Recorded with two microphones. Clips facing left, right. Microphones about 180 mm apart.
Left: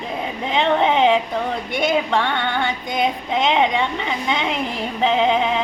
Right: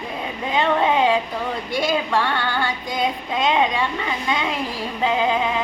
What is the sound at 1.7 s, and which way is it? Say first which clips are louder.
Female singing: left 2 dB; 25° left (ahead or behind).